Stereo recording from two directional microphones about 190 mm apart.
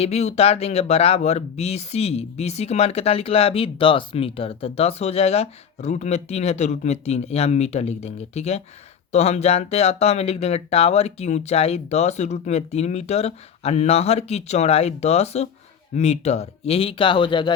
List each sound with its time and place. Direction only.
0.0 s speech: 35° left (ahead or behind)